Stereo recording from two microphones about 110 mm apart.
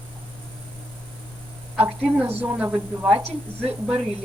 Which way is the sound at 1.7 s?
20° right (ahead or behind).